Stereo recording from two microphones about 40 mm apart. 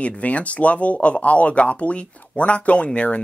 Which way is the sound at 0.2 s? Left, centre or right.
Left.